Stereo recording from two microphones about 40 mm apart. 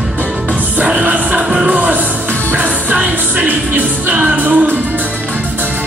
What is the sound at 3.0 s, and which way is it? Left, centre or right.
Music, right.